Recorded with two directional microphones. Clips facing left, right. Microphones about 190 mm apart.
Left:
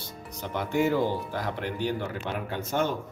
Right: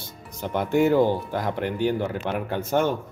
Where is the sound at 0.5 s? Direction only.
55° right (ahead or behind).